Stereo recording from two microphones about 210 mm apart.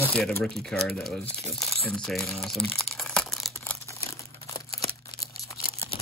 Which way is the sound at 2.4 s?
Centre (ahead or behind).